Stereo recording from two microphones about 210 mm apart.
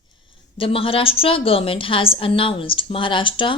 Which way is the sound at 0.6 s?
25° left (ahead or behind).